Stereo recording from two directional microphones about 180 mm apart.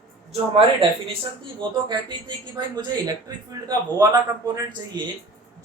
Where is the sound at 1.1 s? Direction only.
25° right (ahead or behind).